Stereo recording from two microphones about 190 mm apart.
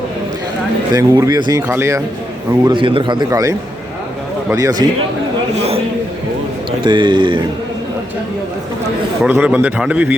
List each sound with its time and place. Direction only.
0.9 s a man's voice: 20° right (ahead or behind)
2.5 s a man's voice: 25° right (ahead or behind)
4.5 s a man's voice: 20° right (ahead or behind)
6.7 s a man's voice: 25° right (ahead or behind)
9.2 s a man's voice: 10° right (ahead or behind)